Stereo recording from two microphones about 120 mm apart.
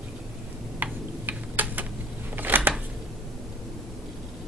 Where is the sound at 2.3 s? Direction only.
15° right (ahead or behind).